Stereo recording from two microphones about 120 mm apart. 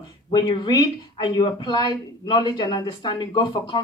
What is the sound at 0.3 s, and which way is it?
Speech, 40° left (ahead or behind).